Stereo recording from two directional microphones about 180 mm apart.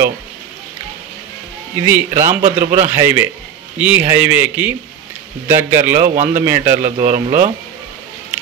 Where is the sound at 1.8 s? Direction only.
15° right (ahead or behind).